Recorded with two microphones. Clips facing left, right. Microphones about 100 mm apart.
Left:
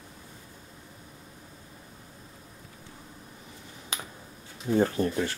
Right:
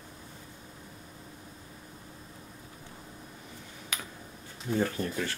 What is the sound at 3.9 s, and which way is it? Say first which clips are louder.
Finger snapping: left 2 dB; 25° left (ahead or behind).